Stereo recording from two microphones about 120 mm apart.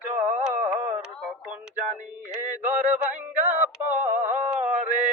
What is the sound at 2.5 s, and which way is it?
Music, 15° right (ahead or behind).